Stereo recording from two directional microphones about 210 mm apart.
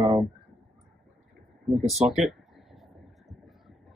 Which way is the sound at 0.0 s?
10° right (ahead or behind).